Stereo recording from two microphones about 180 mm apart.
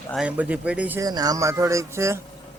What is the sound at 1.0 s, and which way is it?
Speech, 20° right (ahead or behind).